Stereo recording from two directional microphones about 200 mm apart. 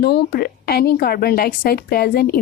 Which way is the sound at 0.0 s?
55° left (ahead or behind).